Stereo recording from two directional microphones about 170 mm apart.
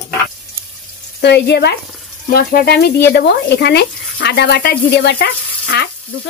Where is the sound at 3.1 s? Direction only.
75° left (ahead or behind).